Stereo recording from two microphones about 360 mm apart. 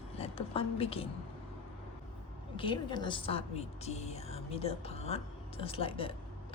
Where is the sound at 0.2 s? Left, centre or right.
Centre.